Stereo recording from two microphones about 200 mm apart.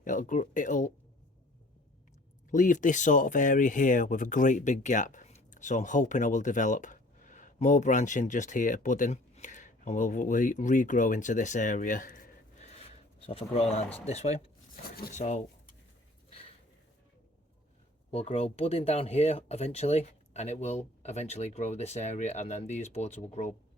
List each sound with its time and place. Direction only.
0.0 s speech: 40° left (ahead or behind)
2.5 s speech: 40° left (ahead or behind)
18.1 s speech: 30° left (ahead or behind)